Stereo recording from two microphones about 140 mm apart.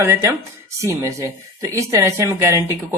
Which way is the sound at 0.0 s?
20° right (ahead or behind).